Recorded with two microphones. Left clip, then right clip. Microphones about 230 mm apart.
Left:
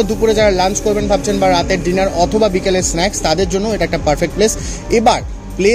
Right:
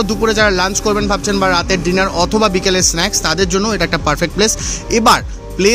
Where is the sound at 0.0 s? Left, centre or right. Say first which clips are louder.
Left 1 dB; right.